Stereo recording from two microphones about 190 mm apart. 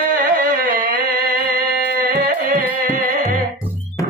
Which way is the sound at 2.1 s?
45° right (ahead or behind).